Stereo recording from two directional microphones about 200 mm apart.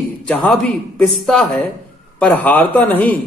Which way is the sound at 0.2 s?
5° left (ahead or behind).